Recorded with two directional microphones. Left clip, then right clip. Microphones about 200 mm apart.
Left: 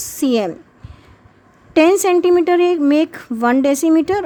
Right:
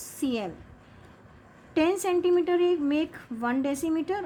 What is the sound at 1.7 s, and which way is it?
A woman's voice, 50° left (ahead or behind).